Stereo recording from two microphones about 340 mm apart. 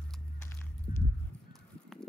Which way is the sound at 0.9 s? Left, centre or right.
Left.